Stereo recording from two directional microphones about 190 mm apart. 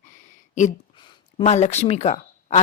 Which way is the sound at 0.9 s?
25° left (ahead or behind).